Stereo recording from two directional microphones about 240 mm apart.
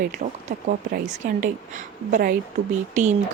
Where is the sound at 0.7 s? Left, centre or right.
Right.